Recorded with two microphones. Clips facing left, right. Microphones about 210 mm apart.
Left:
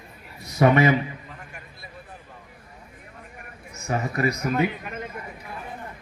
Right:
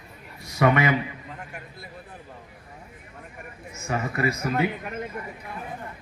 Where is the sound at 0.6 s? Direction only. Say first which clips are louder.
Left 3 dB; 25° left (ahead or behind).